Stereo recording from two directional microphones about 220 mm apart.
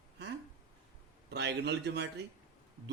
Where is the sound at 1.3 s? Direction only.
50° right (ahead or behind).